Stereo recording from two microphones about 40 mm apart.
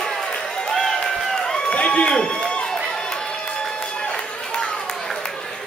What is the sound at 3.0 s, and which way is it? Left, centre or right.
Music, left.